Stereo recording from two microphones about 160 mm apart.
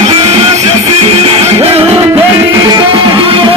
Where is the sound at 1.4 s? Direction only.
40° right (ahead or behind).